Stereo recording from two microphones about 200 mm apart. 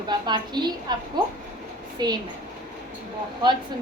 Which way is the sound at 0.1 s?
20° right (ahead or behind).